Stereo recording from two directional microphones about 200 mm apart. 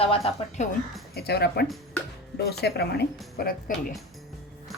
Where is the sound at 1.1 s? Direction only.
55° left (ahead or behind).